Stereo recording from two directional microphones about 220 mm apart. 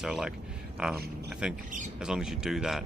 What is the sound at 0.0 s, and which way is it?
Speech, centre (ahead or behind).